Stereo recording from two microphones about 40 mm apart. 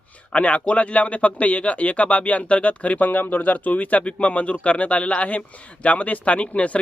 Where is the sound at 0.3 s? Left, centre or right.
Left.